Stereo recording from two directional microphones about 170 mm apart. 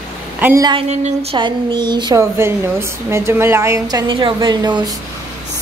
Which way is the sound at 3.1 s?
15° right (ahead or behind).